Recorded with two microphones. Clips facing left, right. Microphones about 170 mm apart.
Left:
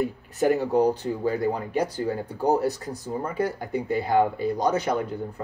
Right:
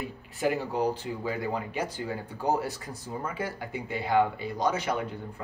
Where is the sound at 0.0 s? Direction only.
40° left (ahead or behind).